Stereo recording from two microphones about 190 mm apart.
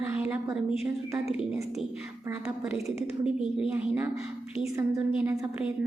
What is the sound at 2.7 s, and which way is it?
Speech, 35° left (ahead or behind).